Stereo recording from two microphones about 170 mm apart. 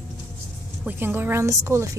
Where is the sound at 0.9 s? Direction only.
10° right (ahead or behind).